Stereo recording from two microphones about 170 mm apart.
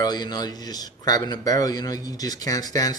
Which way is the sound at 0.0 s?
25° left (ahead or behind).